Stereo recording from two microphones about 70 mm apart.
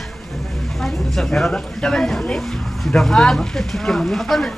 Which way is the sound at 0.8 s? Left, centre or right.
Centre.